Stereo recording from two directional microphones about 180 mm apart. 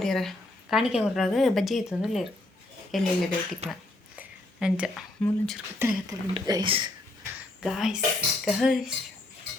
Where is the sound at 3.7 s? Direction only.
5° right (ahead or behind).